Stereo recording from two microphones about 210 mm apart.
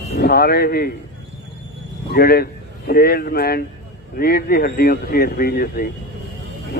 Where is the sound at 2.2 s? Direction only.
45° left (ahead or behind).